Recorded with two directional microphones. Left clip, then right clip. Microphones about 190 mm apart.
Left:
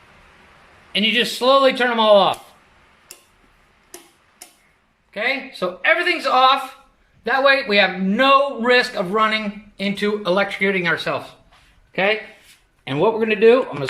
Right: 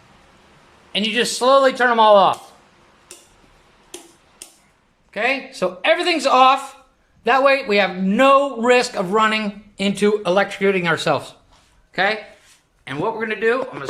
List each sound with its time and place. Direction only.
0.9 s speech: centre (ahead or behind)
5.1 s speech: 5° right (ahead or behind)
5.8 s a man's voice: 20° right (ahead or behind)
11.9 s speech: 5° left (ahead or behind)
12.8 s a man's voice: 20° left (ahead or behind)